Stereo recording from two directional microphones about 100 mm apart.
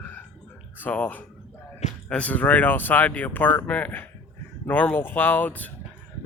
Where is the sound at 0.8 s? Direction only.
15° left (ahead or behind).